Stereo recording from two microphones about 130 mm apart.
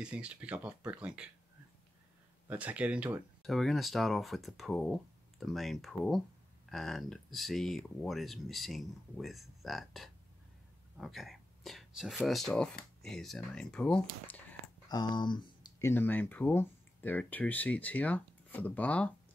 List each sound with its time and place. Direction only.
0.0 s speech: 10° right (ahead or behind)
2.4 s speech: 10° right (ahead or behind)
3.4 s speech: centre (ahead or behind)
14.9 s speech: 35° left (ahead or behind)
15.8 s speech: 15° left (ahead or behind)